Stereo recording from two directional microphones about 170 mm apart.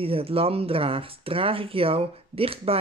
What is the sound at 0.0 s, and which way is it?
Speech, 35° right (ahead or behind).